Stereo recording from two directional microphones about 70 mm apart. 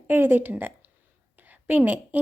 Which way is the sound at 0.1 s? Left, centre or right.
Right.